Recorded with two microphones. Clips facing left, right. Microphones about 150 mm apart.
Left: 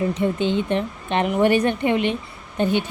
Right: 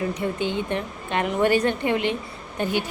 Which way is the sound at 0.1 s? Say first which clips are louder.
Left 5 dB; 20° left (ahead or behind).